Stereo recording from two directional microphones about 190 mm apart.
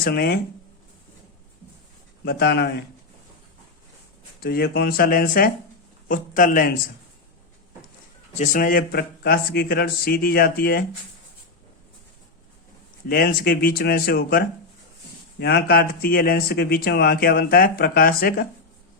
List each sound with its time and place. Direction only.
0.0 s speech: 55° left (ahead or behind)
2.2 s speech: 55° left (ahead or behind)
4.4 s speech: 55° left (ahead or behind)
8.4 s speech: 45° left (ahead or behind)
13.1 s speech: 55° left (ahead or behind)